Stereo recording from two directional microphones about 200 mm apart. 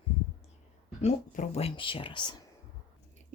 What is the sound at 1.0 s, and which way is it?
Speech, 30° left (ahead or behind).